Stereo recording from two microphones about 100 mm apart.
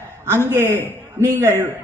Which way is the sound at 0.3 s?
25° right (ahead or behind).